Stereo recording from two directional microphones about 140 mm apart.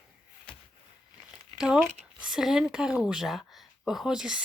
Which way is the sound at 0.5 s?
10° left (ahead or behind).